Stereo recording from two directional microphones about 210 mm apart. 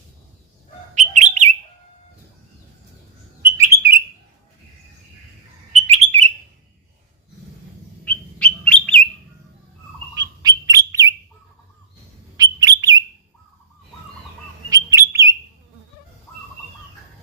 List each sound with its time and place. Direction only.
0.9 s bird: 35° right (ahead or behind)
3.4 s bird: 10° right (ahead or behind)
5.9 s bird: 30° right (ahead or behind)
8.0 s bird: 5° left (ahead or behind)
10.2 s bird: 20° right (ahead or behind)
12.4 s bird: 20° right (ahead or behind)
14.7 s bird: 15° right (ahead or behind)